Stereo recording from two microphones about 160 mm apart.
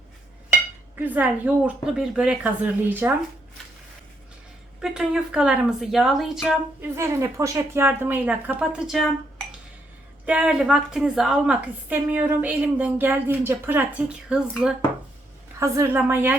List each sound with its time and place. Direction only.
0.9 s a woman's voice: 10° right (ahead or behind)
4.8 s speech: 5° right (ahead or behind)
6.8 s a woman's voice: 15° right (ahead or behind)
10.2 s a woman's voice: 5° right (ahead or behind)
15.5 s a woman's voice: 20° right (ahead or behind)